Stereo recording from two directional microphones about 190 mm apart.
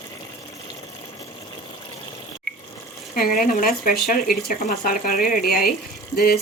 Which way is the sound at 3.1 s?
50° left (ahead or behind).